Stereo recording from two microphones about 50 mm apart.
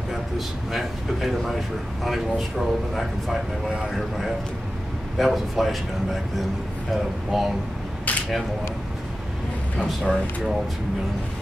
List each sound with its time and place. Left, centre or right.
0.7 s speech: centre
6.9 s speech: centre
8.1 s a sound: left
9.8 s speech: centre